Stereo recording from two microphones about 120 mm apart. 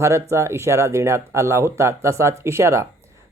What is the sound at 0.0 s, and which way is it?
Speech, 25° right (ahead or behind).